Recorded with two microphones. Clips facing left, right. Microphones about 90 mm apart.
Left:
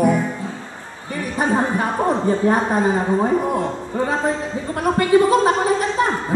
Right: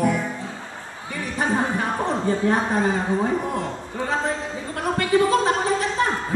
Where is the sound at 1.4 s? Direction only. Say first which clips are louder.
Left 4 dB; 15° left (ahead or behind).